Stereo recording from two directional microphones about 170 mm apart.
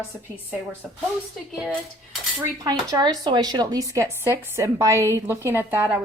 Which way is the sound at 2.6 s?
20° right (ahead or behind).